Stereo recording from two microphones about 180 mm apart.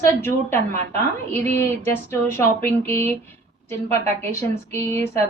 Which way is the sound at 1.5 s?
15° left (ahead or behind).